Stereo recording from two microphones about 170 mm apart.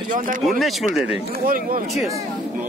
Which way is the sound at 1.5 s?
60° right (ahead or behind).